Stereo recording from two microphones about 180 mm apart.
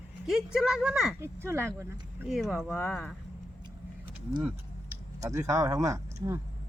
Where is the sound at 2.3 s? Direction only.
Centre (ahead or behind).